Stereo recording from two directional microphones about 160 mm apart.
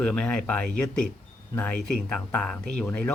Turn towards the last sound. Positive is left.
turn(degrees=5)  # may be behind; listen again after turning